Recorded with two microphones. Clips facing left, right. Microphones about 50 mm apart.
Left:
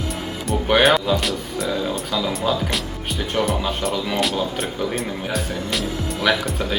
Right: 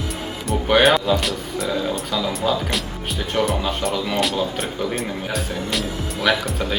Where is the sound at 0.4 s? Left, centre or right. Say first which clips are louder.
Even; centre.